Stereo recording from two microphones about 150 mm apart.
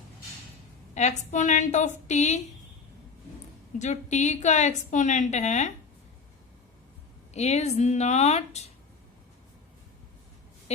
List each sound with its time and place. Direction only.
0.9 s a woman's voice: 50° left (ahead or behind)
3.8 s a woman's voice: 50° left (ahead or behind)
7.3 s a woman's voice: 45° left (ahead or behind)